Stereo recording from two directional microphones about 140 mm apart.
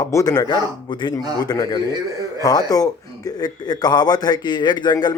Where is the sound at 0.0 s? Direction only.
25° left (ahead or behind).